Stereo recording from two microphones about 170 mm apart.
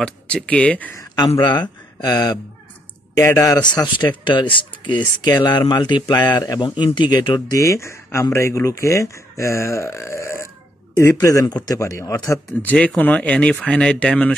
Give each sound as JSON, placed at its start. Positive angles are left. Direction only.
{"t": 0.0, "sound": "speech", "side_deg": 5}
{"t": 1.1, "sound": "speech", "side_deg": 25}